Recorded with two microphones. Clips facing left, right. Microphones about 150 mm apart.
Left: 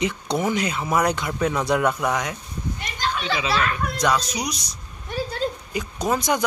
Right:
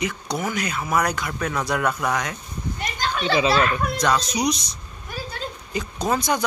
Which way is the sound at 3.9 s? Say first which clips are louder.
Right 1 dB; 10° left (ahead or behind).